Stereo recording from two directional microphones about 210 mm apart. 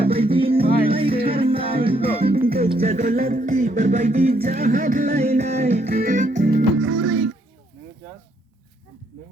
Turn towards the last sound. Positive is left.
turn(degrees=-65)  # may be behind; listen again after turning